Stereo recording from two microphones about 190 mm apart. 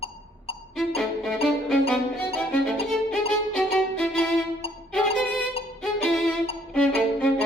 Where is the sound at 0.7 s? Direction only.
Centre (ahead or behind).